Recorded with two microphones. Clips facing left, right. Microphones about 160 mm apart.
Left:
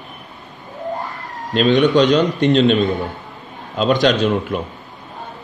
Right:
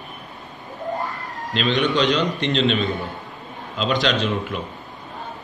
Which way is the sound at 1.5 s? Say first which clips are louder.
Left 7 dB; 45° left (ahead or behind).